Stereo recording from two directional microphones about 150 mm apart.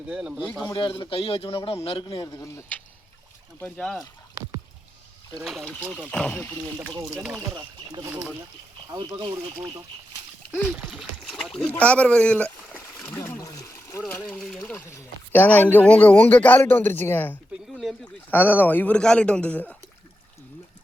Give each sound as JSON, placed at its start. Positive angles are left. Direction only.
{"t": 0.1, "sound": "speech", "side_deg": -5}
{"t": 0.6, "sound": "a man's voice", "side_deg": 30}
{"t": 2.3, "sound": "speech", "side_deg": 20}
{"t": 5.4, "sound": "a man's voice", "side_deg": 0}
{"t": 7.1, "sound": "speech", "side_deg": -5}
{"t": 8.9, "sound": "speech", "side_deg": -25}
{"t": 10.8, "sound": "speech", "side_deg": 0}
{"t": 11.8, "sound": "a sound", "side_deg": 10}
{"t": 13.4, "sound": "water", "side_deg": 20}
{"t": 14.3, "sound": "a sound", "side_deg": 0}
{"t": 14.7, "sound": "speech", "side_deg": 15}
{"t": 17.7, "sound": "a sound", "side_deg": 0}
{"t": 18.3, "sound": "a man's voice", "side_deg": 10}